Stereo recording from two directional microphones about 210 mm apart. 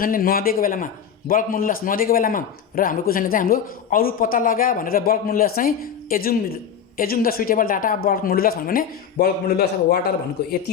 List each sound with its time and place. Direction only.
0.0 s a man's voice: 45° left (ahead or behind)